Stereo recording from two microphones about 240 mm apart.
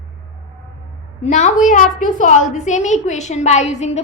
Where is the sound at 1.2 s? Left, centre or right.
Left.